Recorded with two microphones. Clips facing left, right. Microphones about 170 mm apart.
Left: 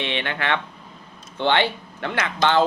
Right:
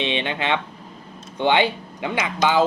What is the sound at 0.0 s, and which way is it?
Speech, 20° right (ahead or behind).